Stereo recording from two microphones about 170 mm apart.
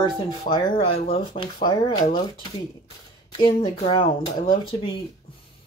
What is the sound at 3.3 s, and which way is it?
Speech, 30° left (ahead or behind).